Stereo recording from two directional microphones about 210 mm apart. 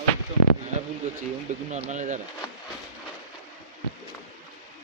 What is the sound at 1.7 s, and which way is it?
Speech, 35° right (ahead or behind).